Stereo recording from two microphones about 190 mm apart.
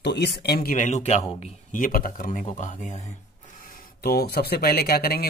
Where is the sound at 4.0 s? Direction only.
55° left (ahead or behind).